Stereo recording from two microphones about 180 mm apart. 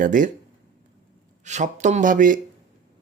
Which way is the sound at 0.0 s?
45° right (ahead or behind).